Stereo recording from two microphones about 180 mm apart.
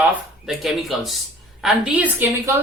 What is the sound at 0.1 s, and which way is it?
A woman's voice, centre (ahead or behind).